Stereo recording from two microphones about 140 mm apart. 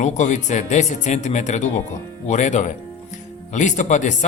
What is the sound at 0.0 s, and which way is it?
Speech, 60° left (ahead or behind).